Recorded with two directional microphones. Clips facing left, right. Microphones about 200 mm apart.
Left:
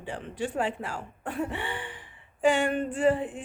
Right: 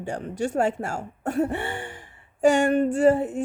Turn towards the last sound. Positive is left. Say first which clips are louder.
# right 6 dB
turn(degrees=-45)  # may be behind; listen again after turning